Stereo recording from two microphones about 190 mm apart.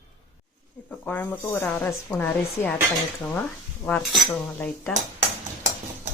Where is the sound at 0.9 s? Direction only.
10° left (ahead or behind).